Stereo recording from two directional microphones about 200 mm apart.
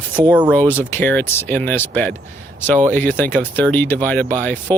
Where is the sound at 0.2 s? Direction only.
20° right (ahead or behind).